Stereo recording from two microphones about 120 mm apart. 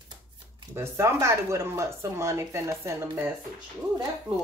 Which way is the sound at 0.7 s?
20° right (ahead or behind).